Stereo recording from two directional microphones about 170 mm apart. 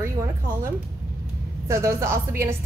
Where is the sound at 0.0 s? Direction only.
15° right (ahead or behind).